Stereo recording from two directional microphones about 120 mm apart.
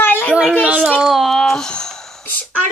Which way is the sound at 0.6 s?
5° right (ahead or behind).